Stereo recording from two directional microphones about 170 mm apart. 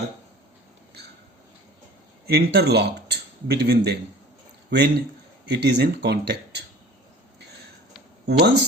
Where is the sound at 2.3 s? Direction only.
75° right (ahead or behind).